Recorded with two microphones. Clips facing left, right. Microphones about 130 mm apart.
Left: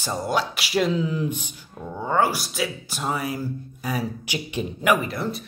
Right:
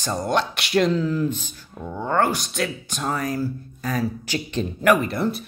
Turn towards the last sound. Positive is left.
turn(degrees=0)  # may be behind; listen again after turning